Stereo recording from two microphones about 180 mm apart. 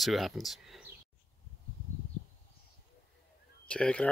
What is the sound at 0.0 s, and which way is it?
Speech, centre (ahead or behind).